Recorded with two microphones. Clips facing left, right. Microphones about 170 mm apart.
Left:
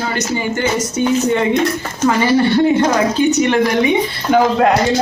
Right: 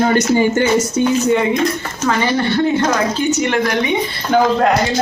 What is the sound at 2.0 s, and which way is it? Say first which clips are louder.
Speech: left 4 dB; 10° left (ahead or behind).